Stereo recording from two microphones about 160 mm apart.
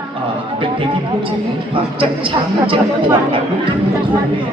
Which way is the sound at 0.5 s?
35° right (ahead or behind).